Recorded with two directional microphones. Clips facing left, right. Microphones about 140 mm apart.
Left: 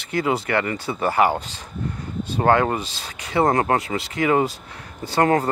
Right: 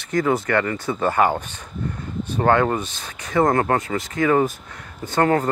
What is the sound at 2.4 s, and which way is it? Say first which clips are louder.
Speech: even; 25° left (ahead or behind).